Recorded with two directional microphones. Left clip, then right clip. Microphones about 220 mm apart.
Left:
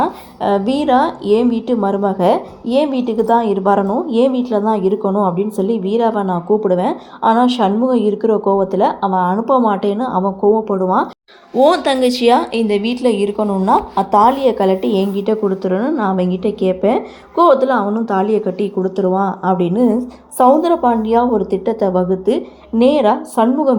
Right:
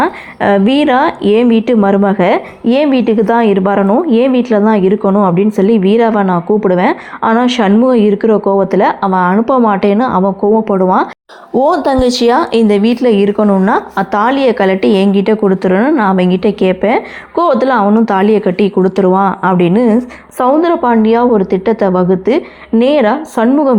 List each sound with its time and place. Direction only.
0.6 s a woman's voice: 25° right (ahead or behind)
11.9 s a woman's voice: 15° right (ahead or behind)
13.4 s a woman's voice: 45° right (ahead or behind)
14.0 s a woman's voice: 20° right (ahead or behind)